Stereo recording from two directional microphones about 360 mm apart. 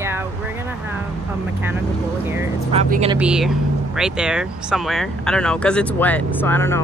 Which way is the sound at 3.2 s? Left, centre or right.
Centre.